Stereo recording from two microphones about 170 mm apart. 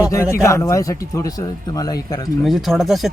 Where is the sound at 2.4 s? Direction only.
Centre (ahead or behind).